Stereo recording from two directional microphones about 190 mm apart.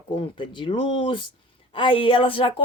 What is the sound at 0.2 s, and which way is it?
A woman's voice, 25° left (ahead or behind).